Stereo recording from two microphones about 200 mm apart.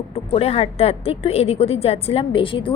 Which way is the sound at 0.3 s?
30° left (ahead or behind).